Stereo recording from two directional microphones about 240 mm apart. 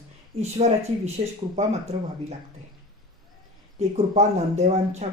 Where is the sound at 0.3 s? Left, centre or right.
Right.